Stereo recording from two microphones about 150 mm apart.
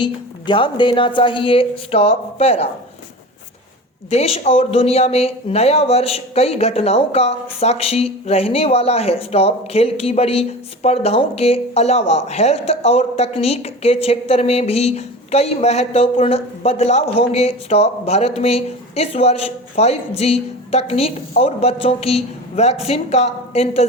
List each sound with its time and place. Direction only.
0.0 s a woman's voice: 35° left (ahead or behind)
4.1 s speech: 45° left (ahead or behind)